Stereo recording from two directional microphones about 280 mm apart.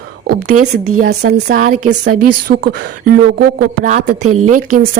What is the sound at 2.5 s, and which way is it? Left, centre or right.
Speech, right.